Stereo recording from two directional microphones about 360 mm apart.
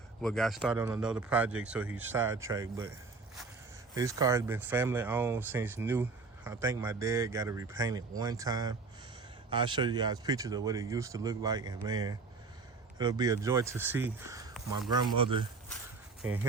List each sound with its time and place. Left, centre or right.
0.2 s speech: centre
3.9 s speech: centre